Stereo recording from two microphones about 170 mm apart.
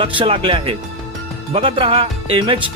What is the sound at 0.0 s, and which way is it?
Speech, 30° right (ahead or behind).